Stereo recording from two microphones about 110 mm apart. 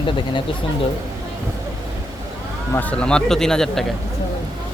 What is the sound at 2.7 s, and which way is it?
Speech, 15° left (ahead or behind).